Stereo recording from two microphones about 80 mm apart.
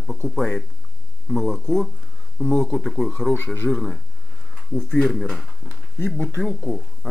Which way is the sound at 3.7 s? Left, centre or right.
Centre.